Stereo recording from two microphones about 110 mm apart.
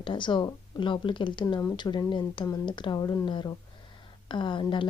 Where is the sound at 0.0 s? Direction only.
45° left (ahead or behind).